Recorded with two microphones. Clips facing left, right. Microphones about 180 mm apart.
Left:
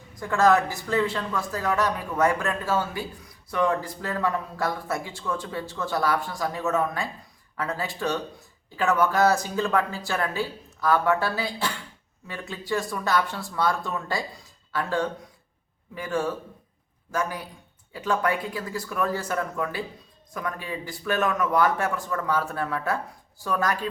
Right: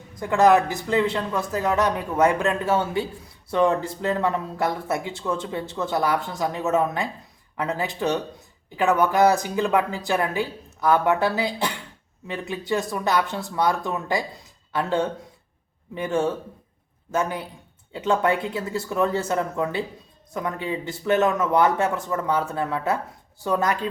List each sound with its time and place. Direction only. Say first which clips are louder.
0.2 s speech: right 3 dB; 20° right (ahead or behind)